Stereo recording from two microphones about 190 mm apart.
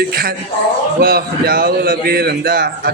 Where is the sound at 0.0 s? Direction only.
55° right (ahead or behind).